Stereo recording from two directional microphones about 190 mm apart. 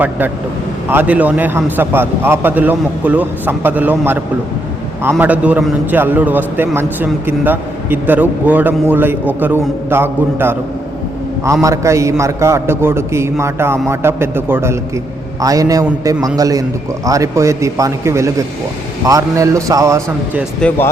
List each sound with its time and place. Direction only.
0.9 s a man's voice: 10° right (ahead or behind)
5.2 s a man's voice: 5° right (ahead or behind)
11.6 s a man's voice: 15° right (ahead or behind)
20.6 s speech: 5° left (ahead or behind)